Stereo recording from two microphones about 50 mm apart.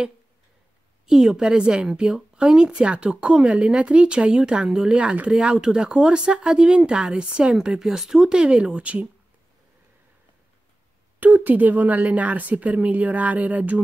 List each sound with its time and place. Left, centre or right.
1.0 s speech: centre
11.1 s speech: right